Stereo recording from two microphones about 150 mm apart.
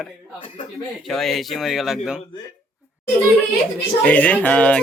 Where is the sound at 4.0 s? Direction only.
10° left (ahead or behind).